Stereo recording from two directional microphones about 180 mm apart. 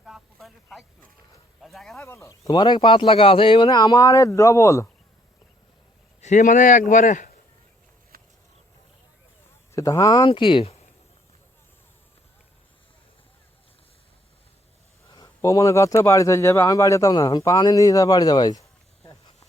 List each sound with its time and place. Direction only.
0.0 s a sound: centre (ahead or behind)
1.6 s speech: centre (ahead or behind)
2.0 s speech: 15° left (ahead or behind)
6.2 s speech: 45° left (ahead or behind)
8.1 s a sound: 55° right (ahead or behind)
9.7 s speech: 20° left (ahead or behind)
15.1 s speech: 20° left (ahead or behind)